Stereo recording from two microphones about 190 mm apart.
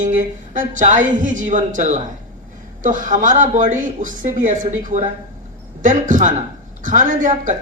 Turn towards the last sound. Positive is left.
turn(degrees=-45)  # may be behind; listen again after turning